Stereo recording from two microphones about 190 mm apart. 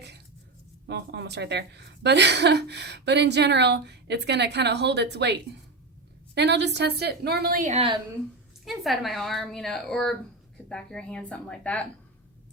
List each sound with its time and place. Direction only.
0.9 s a woman's voice: 60° right (ahead or behind)
7.7 s a woman's voice: 30° right (ahead or behind)
8.6 s speech: centre (ahead or behind)